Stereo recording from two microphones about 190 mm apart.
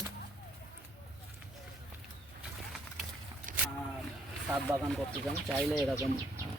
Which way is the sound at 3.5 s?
45° right (ahead or behind).